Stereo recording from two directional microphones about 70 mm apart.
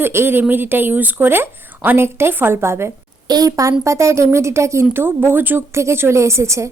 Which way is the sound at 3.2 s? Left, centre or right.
Right.